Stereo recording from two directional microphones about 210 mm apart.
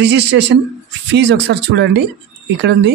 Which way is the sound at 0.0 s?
55° right (ahead or behind).